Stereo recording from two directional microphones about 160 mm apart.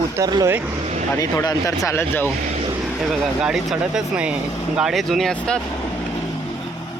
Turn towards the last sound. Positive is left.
turn(degrees=0)  # may be behind; listen again after turning